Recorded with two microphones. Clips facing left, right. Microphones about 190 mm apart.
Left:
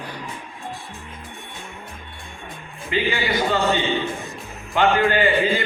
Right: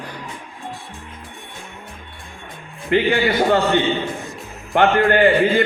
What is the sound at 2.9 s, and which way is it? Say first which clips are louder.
A man's voice: right 6 dB; 55° right (ahead or behind).